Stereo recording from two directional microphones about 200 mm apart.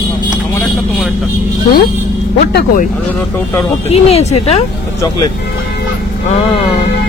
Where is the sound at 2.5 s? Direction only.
50° left (ahead or behind).